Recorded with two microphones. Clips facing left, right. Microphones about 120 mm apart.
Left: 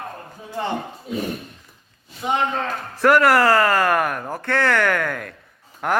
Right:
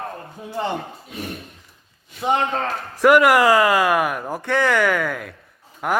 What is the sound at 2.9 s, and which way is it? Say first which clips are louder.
A man's voice: right 2 dB; 10° right (ahead or behind).